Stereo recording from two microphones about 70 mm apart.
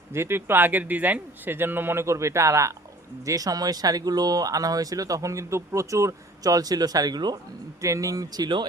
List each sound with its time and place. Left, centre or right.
0.1 s speech: right
3.2 s speech: right
7.8 s speech: right